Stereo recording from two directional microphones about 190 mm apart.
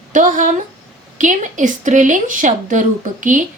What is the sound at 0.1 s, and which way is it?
A woman's voice, 40° right (ahead or behind).